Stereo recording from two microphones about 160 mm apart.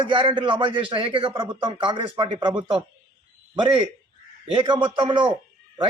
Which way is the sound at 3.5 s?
30° right (ahead or behind).